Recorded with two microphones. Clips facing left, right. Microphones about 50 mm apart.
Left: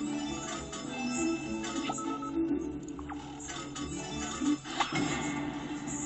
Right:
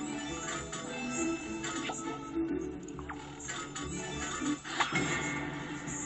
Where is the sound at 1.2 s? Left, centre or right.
Centre.